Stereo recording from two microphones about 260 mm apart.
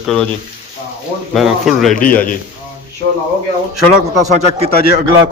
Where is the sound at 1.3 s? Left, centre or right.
Centre.